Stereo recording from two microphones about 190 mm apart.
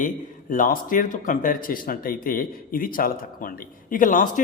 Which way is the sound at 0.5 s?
45° left (ahead or behind).